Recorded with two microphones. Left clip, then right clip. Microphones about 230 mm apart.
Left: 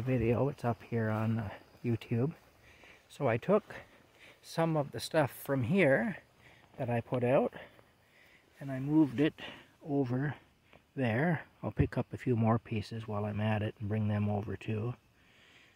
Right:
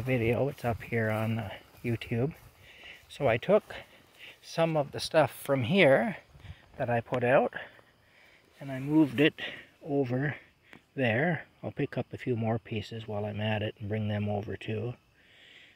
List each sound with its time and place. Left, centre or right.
0.0 s speech: centre
6.8 s speech: centre
10.1 s speech: centre